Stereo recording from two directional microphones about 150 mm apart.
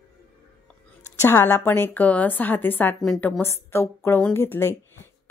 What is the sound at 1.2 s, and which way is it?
A woman's voice, 15° left (ahead or behind).